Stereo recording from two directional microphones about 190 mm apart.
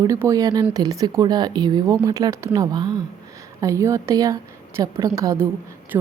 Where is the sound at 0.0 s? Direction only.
15° right (ahead or behind).